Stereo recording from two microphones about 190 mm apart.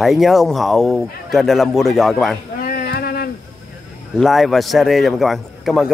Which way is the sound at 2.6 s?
50° left (ahead or behind).